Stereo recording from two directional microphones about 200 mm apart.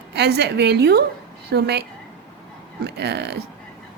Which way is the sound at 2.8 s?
55° right (ahead or behind).